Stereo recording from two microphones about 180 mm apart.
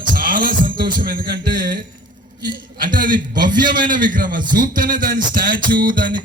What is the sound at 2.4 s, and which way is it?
Speech, 25° right (ahead or behind).